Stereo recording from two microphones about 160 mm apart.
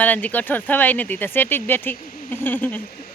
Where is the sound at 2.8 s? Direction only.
70° left (ahead or behind).